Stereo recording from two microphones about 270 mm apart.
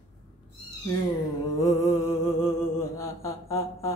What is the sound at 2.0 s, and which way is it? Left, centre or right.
Music, left.